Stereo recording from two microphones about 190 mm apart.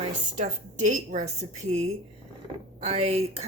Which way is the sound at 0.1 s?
40° right (ahead or behind).